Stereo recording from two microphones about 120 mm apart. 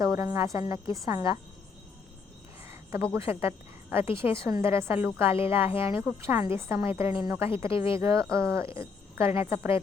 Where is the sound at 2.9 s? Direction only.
25° right (ahead or behind).